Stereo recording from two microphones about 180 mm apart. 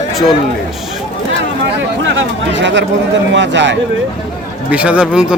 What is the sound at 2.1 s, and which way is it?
Speech, 80° right.